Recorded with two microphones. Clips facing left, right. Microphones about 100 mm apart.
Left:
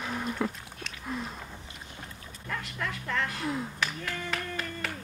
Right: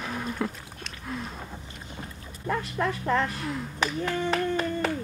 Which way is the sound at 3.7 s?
30° right (ahead or behind).